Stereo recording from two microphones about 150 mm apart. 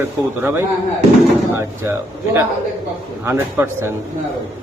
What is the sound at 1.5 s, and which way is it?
A man's voice, 15° right (ahead or behind).